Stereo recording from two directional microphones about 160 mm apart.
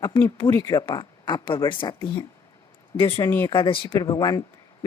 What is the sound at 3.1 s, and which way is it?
Speech, 15° left (ahead or behind).